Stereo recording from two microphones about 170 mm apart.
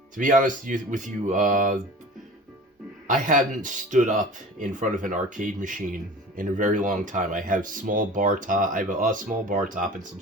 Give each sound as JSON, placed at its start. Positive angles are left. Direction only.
{"t": 0.2, "sound": "speech", "side_deg": -50}
{"t": 3.1, "sound": "speech", "side_deg": -50}